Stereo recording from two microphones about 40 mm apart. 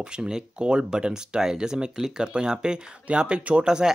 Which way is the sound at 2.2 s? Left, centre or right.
Right.